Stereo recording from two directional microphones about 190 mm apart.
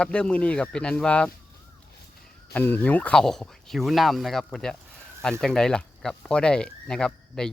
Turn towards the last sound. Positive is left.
turn(degrees=5)  # may be behind; listen again after turning